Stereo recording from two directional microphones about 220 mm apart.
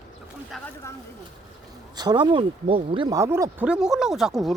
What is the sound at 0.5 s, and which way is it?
Speech, centre (ahead or behind).